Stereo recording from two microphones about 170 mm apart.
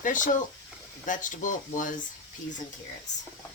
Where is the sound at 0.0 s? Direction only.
50° left (ahead or behind).